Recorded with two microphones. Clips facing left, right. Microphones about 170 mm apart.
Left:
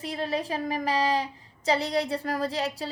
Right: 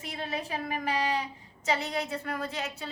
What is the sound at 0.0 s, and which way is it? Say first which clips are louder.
Speech: left 6 dB; 35° left (ahead or behind).